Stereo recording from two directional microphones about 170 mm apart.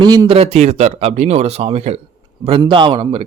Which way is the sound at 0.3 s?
40° right (ahead or behind).